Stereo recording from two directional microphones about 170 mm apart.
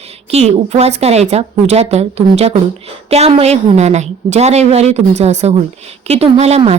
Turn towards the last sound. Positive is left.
turn(degrees=-40)  # may be behind; listen again after turning